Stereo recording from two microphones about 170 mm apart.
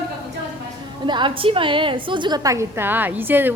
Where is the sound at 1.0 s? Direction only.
30° right (ahead or behind); by 3.5 s 10° right (ahead or behind).